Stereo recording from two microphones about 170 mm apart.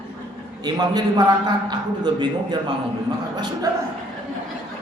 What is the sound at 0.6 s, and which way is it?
A man's voice, 25° right (ahead or behind).